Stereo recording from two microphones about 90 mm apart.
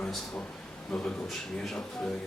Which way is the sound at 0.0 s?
10° left (ahead or behind).